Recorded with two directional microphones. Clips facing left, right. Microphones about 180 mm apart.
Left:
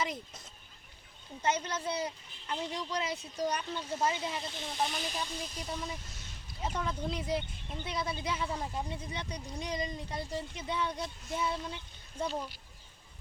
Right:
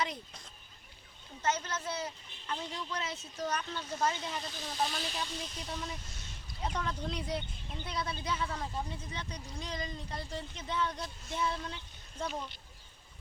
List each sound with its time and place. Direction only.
0.0 s speech: 5° left (ahead or behind)
4.4 s speech: 25° left (ahead or behind)
4.8 s speech: 10° left (ahead or behind)